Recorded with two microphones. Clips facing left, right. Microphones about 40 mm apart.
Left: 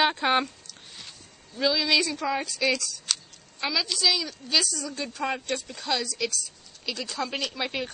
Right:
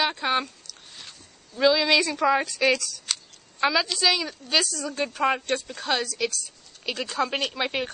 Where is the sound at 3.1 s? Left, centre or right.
Centre.